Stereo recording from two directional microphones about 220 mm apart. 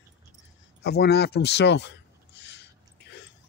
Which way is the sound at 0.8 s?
45° left (ahead or behind).